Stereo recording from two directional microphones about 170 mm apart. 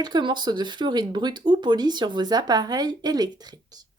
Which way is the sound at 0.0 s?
25° right (ahead or behind).